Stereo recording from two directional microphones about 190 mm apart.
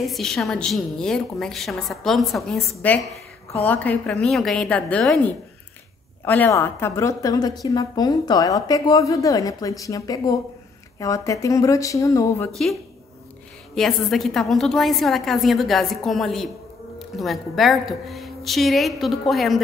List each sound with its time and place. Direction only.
0.0 s a woman's voice: centre (ahead or behind)
13.7 s a woman's voice: centre (ahead or behind)